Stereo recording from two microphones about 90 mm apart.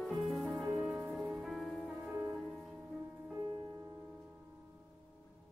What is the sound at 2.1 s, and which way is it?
Music, 30° right (ahead or behind).